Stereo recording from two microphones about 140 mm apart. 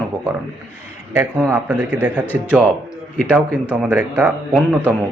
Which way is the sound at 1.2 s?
15° right (ahead or behind).